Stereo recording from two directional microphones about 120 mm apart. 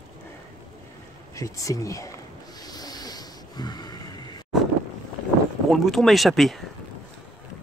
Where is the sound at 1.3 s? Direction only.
25° left (ahead or behind).